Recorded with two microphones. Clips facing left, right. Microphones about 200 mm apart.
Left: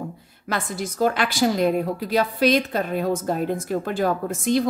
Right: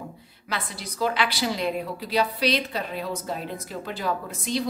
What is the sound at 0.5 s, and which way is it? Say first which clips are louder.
A woman's voice: left 6 dB; 45° left (ahead or behind).